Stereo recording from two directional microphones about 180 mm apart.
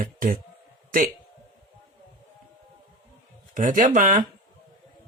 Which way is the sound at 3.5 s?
50° right (ahead or behind).